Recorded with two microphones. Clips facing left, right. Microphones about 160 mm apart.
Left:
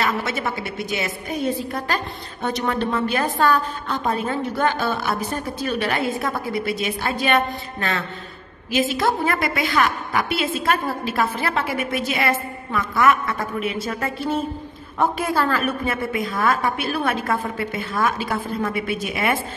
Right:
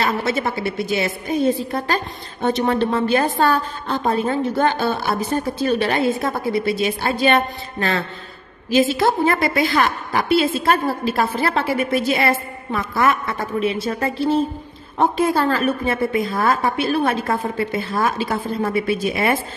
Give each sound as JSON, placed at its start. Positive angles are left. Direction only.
{"t": 0.0, "sound": "a woman's voice", "side_deg": -30}
{"t": 2.4, "sound": "a woman's voice", "side_deg": -30}